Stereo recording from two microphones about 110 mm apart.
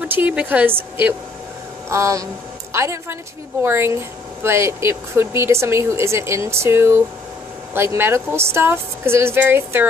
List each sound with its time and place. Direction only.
0.1 s a woman's voice: 15° right (ahead or behind)
1.9 s speech: 25° right (ahead or behind)